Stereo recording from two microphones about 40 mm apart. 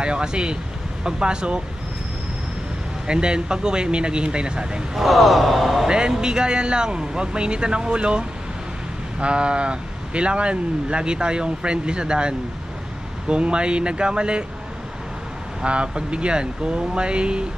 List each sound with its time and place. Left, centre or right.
0.0 s speech: right
3.1 s speech: right
4.9 s speech: centre
5.9 s speech: right
15.6 s speech: right